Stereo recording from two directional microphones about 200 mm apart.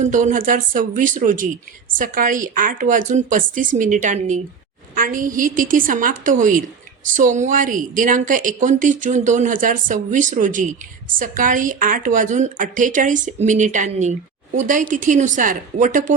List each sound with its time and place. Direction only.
0.0 s a woman's voice: 40° right (ahead or behind)